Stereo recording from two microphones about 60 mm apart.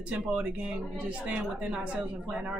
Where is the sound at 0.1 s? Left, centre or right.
Centre.